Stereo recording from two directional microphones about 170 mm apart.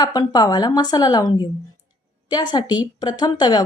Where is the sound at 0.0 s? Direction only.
25° left (ahead or behind).